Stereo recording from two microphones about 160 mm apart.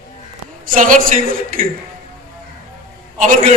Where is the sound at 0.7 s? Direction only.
55° right (ahead or behind).